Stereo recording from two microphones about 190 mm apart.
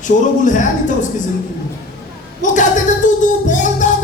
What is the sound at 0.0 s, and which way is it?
Speech, 40° left (ahead or behind).